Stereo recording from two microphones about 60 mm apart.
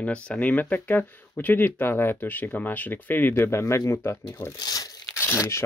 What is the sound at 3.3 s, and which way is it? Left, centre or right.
Speech, left.